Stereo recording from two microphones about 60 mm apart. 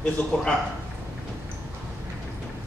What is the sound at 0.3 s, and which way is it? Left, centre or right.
Speech, centre.